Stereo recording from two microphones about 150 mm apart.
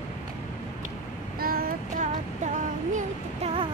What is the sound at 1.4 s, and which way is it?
Child singing, 80° right.